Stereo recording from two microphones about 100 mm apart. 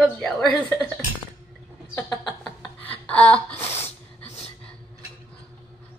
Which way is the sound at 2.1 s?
45° left (ahead or behind).